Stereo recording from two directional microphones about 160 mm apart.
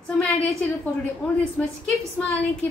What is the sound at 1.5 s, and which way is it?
Speech, 5° left (ahead or behind).